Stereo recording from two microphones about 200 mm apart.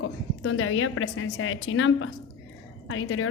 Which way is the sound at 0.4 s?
90° left.